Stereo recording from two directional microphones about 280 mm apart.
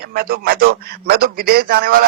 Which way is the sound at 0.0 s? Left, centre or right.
Right.